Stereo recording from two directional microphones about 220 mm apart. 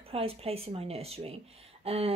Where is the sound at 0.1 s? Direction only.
25° right (ahead or behind).